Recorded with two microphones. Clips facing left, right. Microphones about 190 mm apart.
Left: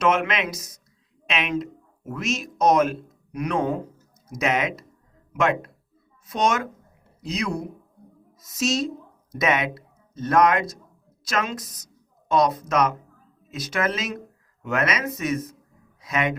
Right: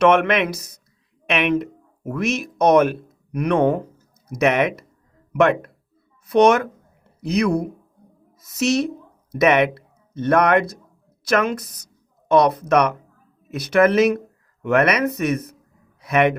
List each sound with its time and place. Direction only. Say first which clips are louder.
0.0 s a man's voice: right 6 dB; 60° right (ahead or behind)